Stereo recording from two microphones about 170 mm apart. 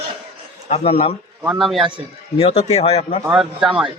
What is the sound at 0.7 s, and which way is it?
Speech, 35° left (ahead or behind).